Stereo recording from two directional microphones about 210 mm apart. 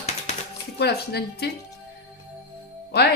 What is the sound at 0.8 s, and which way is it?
Speech, 50° left (ahead or behind).